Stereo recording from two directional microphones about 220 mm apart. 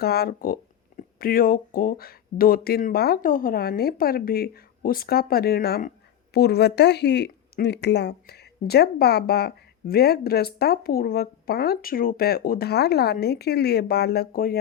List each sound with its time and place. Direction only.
0.0 s speech: 45° left (ahead or behind)